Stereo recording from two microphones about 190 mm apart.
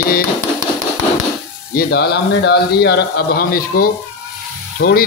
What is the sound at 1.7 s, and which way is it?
Speech, 60° left (ahead or behind).